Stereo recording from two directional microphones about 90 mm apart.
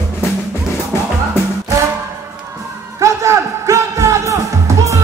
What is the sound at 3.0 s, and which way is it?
Music, 35° right (ahead or behind).